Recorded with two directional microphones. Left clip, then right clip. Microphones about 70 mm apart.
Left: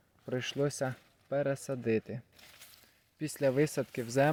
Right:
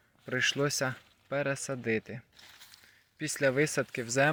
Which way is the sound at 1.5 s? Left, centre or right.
Left.